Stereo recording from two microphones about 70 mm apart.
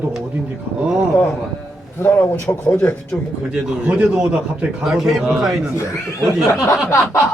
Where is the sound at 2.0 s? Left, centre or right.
Left.